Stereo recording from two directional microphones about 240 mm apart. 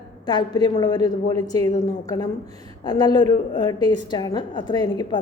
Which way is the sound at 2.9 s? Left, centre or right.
Centre.